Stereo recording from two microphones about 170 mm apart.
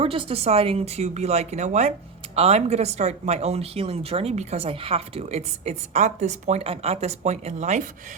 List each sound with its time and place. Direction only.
0.0 s speech: 30° right (ahead or behind)